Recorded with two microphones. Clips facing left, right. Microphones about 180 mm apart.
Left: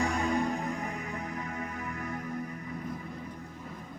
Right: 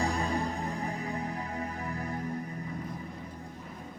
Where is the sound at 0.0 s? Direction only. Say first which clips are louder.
Left 2 dB; 30° right (ahead or behind).